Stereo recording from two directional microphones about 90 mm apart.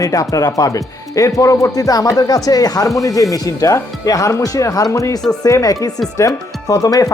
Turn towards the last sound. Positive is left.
turn(degrees=40)  # may be behind; listen again after turning